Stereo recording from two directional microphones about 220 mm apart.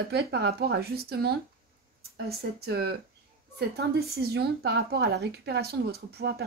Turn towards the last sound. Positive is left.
turn(degrees=-45)  # may be behind; listen again after turning